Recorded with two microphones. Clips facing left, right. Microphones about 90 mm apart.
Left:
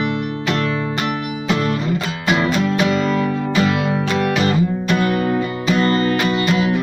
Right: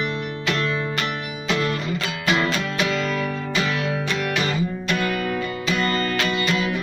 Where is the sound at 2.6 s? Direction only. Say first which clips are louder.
Left 6 dB; 25° left (ahead or behind).